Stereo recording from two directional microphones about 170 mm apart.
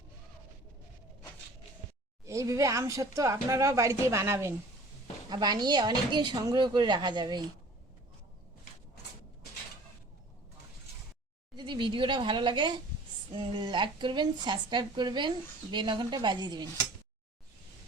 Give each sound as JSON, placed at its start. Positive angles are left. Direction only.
{"t": 2.2, "sound": "speech", "side_deg": -20}
{"t": 11.5, "sound": "speech", "side_deg": -25}